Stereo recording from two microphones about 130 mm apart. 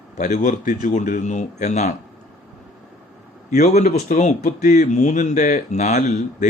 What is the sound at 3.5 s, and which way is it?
Speech, 60° left (ahead or behind).